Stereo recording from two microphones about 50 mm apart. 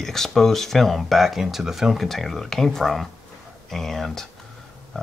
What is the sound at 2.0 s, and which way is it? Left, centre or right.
Speech, centre.